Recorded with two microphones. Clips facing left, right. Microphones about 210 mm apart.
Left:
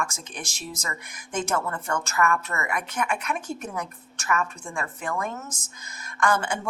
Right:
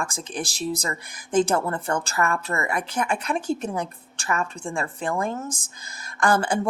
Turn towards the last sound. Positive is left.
turn(degrees=-35)  # may be behind; listen again after turning